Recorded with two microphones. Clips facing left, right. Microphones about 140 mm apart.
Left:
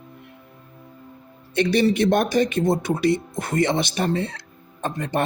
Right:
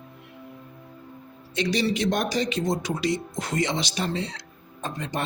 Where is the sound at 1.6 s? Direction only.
55° left (ahead or behind).